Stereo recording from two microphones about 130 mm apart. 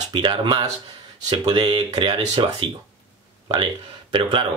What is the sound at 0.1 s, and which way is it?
Speech, 35° right (ahead or behind).